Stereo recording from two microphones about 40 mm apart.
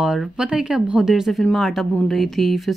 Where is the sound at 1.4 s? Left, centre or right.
Centre.